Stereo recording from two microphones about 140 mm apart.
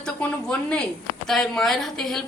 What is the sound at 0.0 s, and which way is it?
A woman's voice, 5° left (ahead or behind).